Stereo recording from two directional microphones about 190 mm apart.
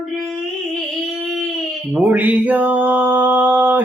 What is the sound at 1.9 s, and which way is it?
Mantra, 10° right (ahead or behind).